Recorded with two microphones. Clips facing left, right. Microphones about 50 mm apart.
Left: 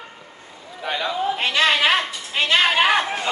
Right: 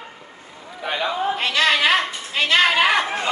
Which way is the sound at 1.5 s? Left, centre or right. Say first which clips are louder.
Even; left.